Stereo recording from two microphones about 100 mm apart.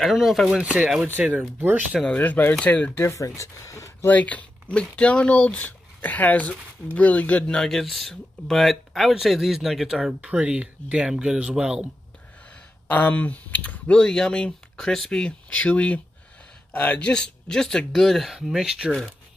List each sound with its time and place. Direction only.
0.0 s speech: centre (ahead or behind); by 2.0 s 20° right (ahead or behind)
2.0 s speech: 15° left (ahead or behind)
3.0 s speech: 25° left (ahead or behind)
4.1 s speech: 15° left (ahead or behind); by 11.8 s 5° right (ahead or behind)
12.4 s speech: 15° left (ahead or behind); by 18.9 s 5° right (ahead or behind)